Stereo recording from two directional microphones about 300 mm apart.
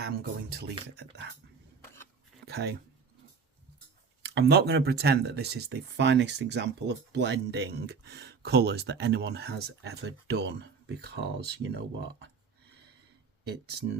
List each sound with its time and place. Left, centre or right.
0.0 s speech: right
2.5 s speech: right
4.2 s speech: right
13.4 s speech: right